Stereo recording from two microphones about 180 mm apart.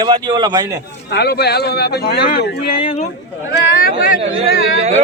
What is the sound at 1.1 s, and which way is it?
Speech, 65° left (ahead or behind).